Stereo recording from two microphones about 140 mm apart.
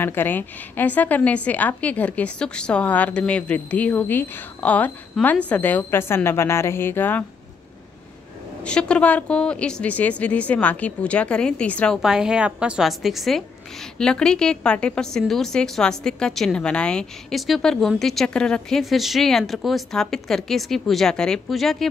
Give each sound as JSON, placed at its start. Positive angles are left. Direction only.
{"t": 0.0, "sound": "a woman's voice", "side_deg": 15}
{"t": 8.6, "sound": "a woman's voice", "side_deg": 5}
{"t": 12.0, "sound": "a woman's voice", "side_deg": -5}